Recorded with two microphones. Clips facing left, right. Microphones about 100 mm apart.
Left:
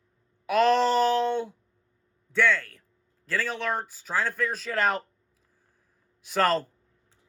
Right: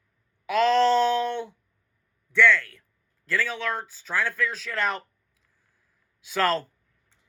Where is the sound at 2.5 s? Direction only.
45° left (ahead or behind).